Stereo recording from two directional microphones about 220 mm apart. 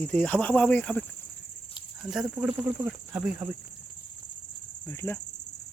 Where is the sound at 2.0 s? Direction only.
5° right (ahead or behind).